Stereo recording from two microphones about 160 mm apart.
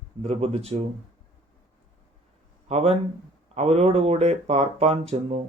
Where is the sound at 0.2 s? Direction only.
40° right (ahead or behind).